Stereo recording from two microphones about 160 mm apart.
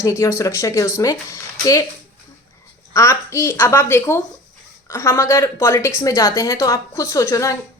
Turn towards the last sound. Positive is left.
turn(degrees=20)  # may be behind; listen again after turning